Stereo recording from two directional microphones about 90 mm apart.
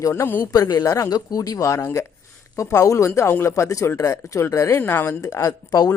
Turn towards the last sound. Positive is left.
turn(degrees=45)  # may be behind; listen again after turning